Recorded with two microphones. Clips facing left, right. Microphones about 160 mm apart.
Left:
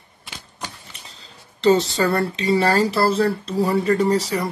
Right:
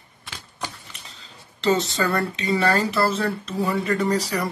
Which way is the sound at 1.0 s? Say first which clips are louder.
Left 1 dB; 35° left (ahead or behind).